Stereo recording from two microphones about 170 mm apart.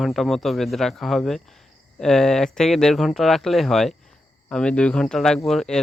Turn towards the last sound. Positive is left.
turn(degrees=5)  # may be behind; listen again after turning